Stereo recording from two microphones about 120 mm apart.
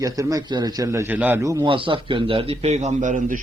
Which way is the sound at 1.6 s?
45° right (ahead or behind).